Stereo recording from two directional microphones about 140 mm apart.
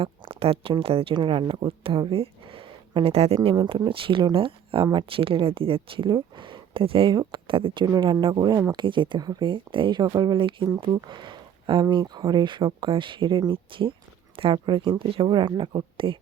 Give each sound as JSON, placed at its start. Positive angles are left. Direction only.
{"t": 0.0, "sound": "speech", "side_deg": -40}
{"t": 3.5, "sound": "speech", "side_deg": -30}